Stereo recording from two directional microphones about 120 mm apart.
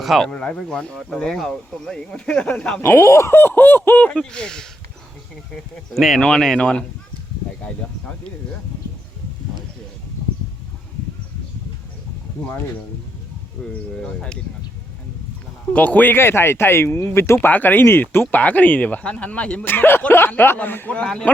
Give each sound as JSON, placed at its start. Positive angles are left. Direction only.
{"t": 0.0, "sound": "speech", "side_deg": 0}
{"t": 2.9, "sound": "speech", "side_deg": 20}
{"t": 5.9, "sound": "speech", "side_deg": 0}
{"t": 13.6, "sound": "speech", "side_deg": 5}
{"t": 15.7, "sound": "speech", "side_deg": 10}